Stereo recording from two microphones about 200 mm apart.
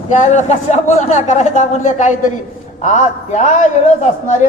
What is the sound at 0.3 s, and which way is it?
Speech, 35° left (ahead or behind).